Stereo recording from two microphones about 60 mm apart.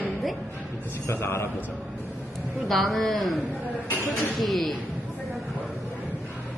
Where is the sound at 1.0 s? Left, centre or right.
Left.